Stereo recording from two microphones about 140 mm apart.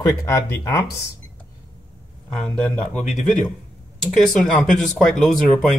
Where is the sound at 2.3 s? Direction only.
5° left (ahead or behind).